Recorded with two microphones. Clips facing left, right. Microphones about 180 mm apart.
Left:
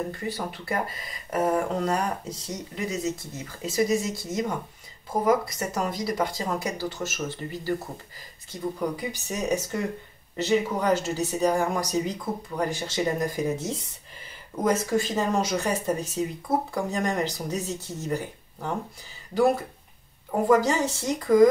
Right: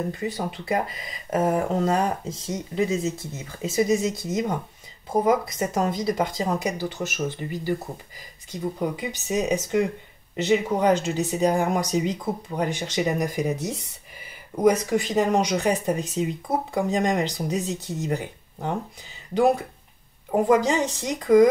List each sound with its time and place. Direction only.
0.1 s speech: 20° right (ahead or behind)
20.2 s speech: 20° right (ahead or behind)